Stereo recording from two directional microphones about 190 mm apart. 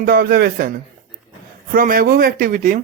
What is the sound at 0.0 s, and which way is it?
Speech, 50° right (ahead or behind).